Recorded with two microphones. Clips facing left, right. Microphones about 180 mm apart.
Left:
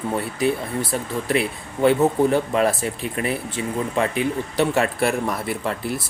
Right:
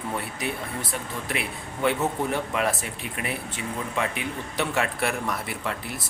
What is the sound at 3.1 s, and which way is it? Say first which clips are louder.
Speech: left 7 dB; 35° left (ahead or behind).